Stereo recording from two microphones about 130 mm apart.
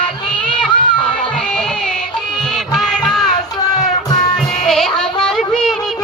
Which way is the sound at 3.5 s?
30° left (ahead or behind).